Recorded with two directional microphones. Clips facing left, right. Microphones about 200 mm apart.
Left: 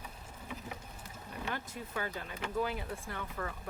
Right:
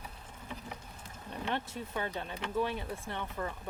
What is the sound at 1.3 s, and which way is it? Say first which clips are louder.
Speech: right 4 dB; 25° right (ahead or behind).